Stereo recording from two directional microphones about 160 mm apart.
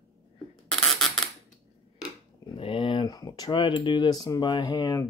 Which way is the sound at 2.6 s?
30° left (ahead or behind).